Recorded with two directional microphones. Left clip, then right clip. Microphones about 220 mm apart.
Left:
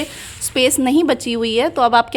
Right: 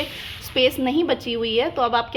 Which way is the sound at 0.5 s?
45° left (ahead or behind).